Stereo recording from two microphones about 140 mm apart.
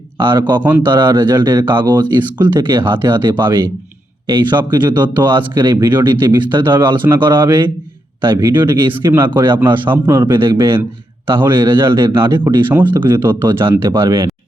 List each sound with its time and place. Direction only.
0.3 s speech: 30° right (ahead or behind)
0.6 s a man's voice: 10° right (ahead or behind)
4.7 s speech: 30° right (ahead or behind)
5.2 s a man's voice: 15° right (ahead or behind)